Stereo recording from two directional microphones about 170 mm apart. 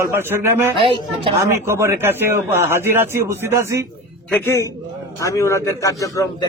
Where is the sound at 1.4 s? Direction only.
15° right (ahead or behind).